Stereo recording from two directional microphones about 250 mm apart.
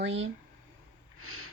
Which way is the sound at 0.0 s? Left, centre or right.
Right.